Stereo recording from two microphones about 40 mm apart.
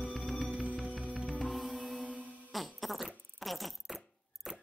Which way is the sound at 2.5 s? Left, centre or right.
Centre.